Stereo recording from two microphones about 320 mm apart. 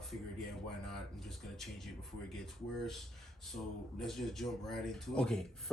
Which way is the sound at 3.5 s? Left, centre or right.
Centre.